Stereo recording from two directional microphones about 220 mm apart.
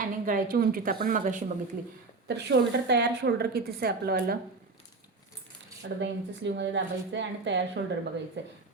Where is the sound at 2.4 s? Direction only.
50° right (ahead or behind).